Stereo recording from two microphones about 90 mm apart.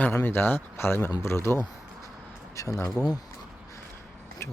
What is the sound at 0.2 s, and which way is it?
Speech, 20° left (ahead or behind).